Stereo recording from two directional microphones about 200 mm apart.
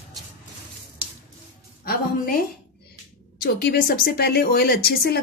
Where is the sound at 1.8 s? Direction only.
50° left (ahead or behind).